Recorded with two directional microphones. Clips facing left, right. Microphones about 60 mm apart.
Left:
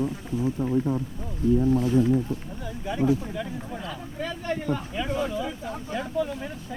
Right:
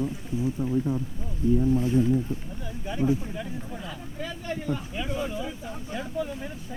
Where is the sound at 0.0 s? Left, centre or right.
Left.